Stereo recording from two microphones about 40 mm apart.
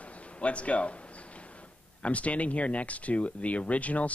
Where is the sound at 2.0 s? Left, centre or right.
Left.